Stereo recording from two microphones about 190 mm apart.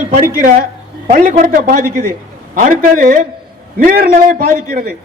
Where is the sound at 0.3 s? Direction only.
45° right (ahead or behind).